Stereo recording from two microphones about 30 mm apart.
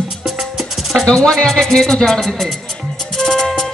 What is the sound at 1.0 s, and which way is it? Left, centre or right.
Speech, left.